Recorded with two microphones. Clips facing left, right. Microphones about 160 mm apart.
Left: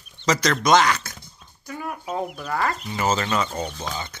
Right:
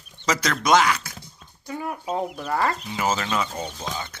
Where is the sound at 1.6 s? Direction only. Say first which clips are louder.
Right 2 dB; 25° right (ahead or behind).